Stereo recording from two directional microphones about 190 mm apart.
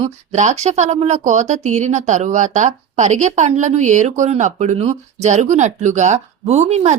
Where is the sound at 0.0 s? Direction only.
35° right (ahead or behind).